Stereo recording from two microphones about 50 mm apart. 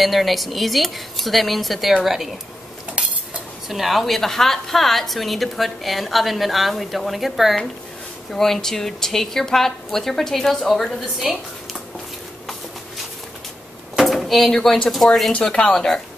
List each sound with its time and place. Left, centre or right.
0.0 s a woman's voice: centre
3.0 s cutlery: right
3.6 s a woman's voice: centre
8.3 s a woman's voice: centre
11.3 s a woman's voice: centre
14.0 s a woman's voice: centre
15.3 s speech: left